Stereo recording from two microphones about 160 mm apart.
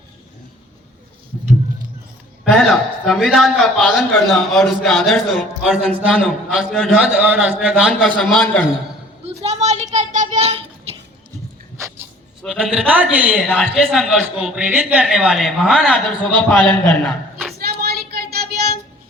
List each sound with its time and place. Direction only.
2.4 s a man's voice: centre (ahead or behind)
7.9 s a man's voice: 5° left (ahead or behind)
9.2 s children playing: 40° right (ahead or behind)
12.4 s a man's voice: 5° right (ahead or behind)
13.3 s a man's voice: centre (ahead or behind)
17.6 s child singing: 75° right (ahead or behind)